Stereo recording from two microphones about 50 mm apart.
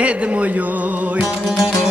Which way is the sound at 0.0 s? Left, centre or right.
Right.